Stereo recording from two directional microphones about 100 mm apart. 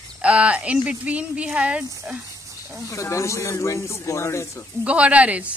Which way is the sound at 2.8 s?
30° left (ahead or behind).